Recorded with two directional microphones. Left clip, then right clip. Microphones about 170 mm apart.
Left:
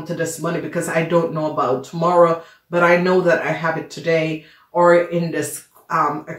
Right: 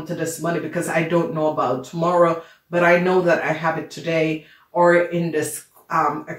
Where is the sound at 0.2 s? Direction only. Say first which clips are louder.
Left 1 dB; 40° left (ahead or behind).